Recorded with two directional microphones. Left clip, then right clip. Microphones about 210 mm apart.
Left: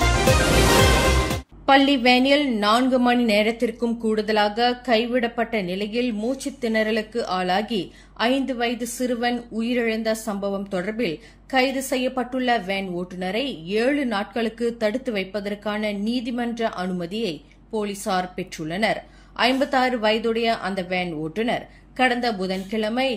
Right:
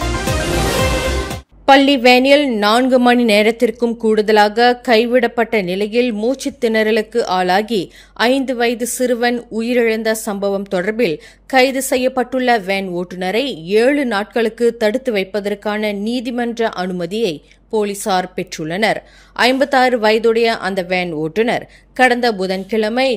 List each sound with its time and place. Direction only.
1.7 s a woman's voice: 45° right (ahead or behind)